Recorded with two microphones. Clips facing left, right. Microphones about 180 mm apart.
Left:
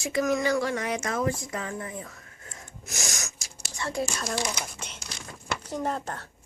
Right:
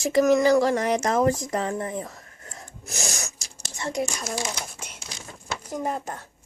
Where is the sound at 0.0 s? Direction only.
40° right (ahead or behind).